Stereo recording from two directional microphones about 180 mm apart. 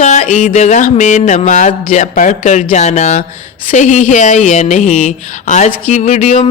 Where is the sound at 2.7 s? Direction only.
40° left (ahead or behind).